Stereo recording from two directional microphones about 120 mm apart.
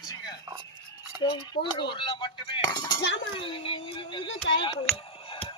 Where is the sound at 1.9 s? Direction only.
40° left (ahead or behind).